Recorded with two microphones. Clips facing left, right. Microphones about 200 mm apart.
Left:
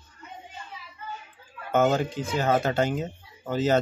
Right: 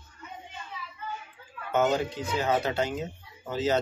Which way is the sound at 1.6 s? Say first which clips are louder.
Left 3 dB; 50° left (ahead or behind).